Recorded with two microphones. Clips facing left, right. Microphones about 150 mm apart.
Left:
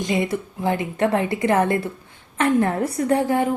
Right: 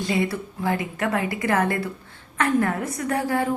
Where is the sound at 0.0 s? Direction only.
20° left (ahead or behind).